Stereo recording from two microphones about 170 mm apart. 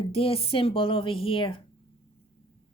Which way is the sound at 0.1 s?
35° left (ahead or behind).